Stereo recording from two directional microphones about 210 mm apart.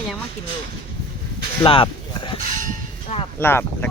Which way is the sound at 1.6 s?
25° left (ahead or behind).